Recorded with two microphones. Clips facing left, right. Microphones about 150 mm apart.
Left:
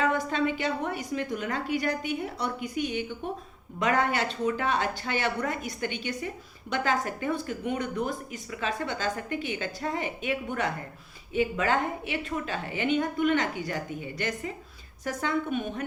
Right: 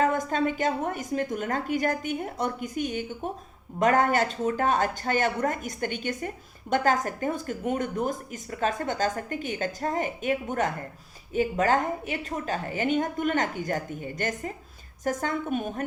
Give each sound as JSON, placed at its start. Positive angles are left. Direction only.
{"t": 0.0, "sound": "speech", "side_deg": -45}